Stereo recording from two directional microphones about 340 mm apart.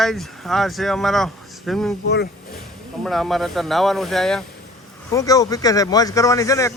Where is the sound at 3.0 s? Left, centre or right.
Centre.